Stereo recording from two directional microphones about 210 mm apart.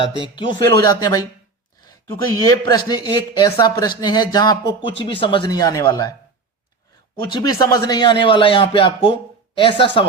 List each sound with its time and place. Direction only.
0.3 s speech: 20° left (ahead or behind)
2.4 s a man's voice: 15° left (ahead or behind)
7.3 s speech: 20° left (ahead or behind)